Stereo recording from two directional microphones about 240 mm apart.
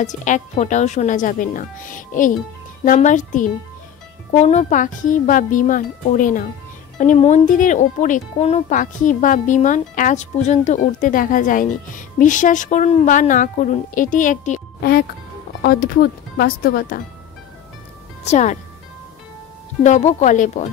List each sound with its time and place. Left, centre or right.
0.0 s speech: left
18.2 s speech: left
19.8 s speech: left